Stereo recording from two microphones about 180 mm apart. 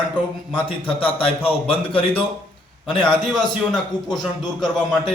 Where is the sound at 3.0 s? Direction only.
5° left (ahead or behind).